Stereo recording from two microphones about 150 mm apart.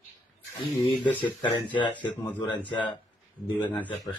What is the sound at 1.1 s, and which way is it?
Speech, 10° left (ahead or behind).